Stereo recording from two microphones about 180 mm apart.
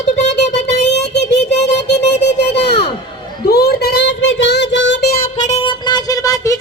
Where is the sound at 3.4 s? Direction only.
60° left (ahead or behind).